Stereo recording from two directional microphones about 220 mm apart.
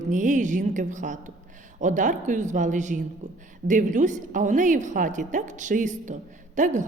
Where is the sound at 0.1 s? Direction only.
35° right (ahead or behind).